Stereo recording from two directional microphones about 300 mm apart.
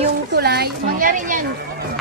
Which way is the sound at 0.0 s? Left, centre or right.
Right.